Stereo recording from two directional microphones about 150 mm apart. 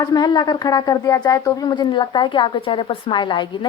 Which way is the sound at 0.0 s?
25° left (ahead or behind).